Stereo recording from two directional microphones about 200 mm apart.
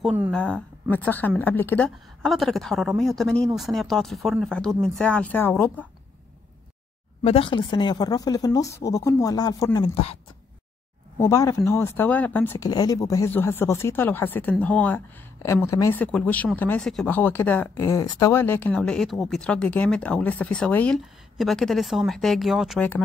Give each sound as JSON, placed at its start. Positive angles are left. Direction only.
{"t": 0.0, "sound": "speech", "side_deg": -10}
{"t": 0.3, "sound": "a woman's voice", "side_deg": 5}
{"t": 7.2, "sound": "speech", "side_deg": 25}
{"t": 11.1, "sound": "speech", "side_deg": 15}